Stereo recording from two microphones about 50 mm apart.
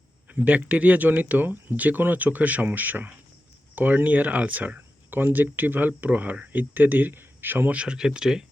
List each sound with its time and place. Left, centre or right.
0.3 s speech: right
7.7 s speech: right